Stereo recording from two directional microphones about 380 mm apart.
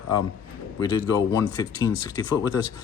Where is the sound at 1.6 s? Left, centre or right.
Centre.